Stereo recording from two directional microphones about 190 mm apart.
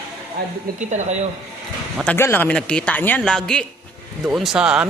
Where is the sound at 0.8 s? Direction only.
40° right (ahead or behind).